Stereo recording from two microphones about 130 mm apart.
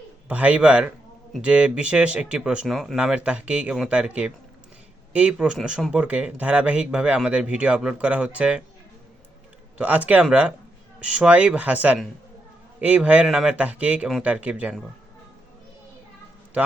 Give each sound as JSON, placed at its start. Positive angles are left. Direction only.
{"t": 0.3, "sound": "speech", "side_deg": -10}
{"t": 9.7, "sound": "speech", "side_deg": -10}